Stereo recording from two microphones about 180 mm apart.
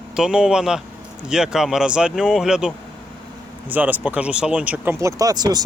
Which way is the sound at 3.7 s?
10° right (ahead or behind).